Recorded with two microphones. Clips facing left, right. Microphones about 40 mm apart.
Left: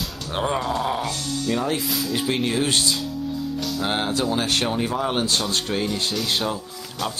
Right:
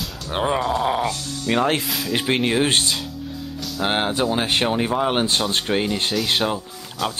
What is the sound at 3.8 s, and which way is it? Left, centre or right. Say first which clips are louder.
Speech: right 4 dB; right.